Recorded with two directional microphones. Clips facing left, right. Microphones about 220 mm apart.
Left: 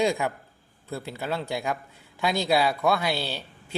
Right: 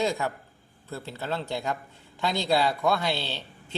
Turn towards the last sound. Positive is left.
turn(degrees=10)  # may be behind; listen again after turning